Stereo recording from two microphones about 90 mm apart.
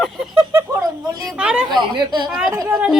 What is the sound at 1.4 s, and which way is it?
Speech, 10° right (ahead or behind).